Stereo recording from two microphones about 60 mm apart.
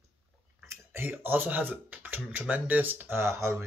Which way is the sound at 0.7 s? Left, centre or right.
Right.